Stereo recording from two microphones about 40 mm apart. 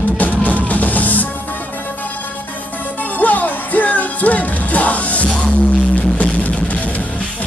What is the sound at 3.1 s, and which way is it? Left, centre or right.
Music, left.